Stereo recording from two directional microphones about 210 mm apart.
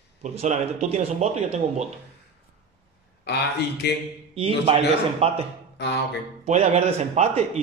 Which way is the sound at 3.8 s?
50° left (ahead or behind).